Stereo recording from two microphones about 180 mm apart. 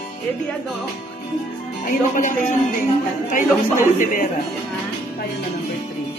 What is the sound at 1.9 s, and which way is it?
Speech, 45° left (ahead or behind).